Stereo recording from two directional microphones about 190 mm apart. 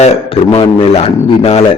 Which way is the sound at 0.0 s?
30° left (ahead or behind).